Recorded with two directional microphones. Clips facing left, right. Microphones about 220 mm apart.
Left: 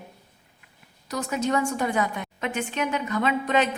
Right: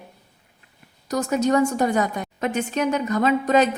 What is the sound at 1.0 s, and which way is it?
A woman's voice, 40° right (ahead or behind).